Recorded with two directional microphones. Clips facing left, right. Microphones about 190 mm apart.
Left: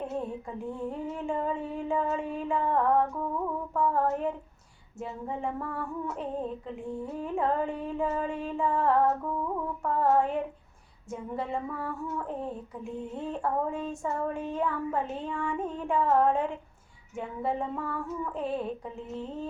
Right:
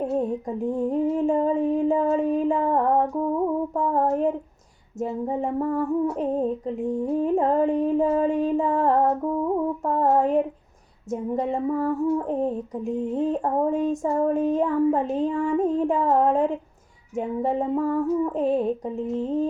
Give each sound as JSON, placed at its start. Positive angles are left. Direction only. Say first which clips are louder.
{"t": 0.0, "sound": "female singing", "louder": "right 9 dB", "side_deg": -40}